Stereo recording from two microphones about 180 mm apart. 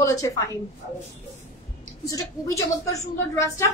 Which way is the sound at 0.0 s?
20° left (ahead or behind).